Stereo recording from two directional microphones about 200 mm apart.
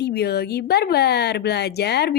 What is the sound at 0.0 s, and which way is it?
Speech, 55° left (ahead or behind).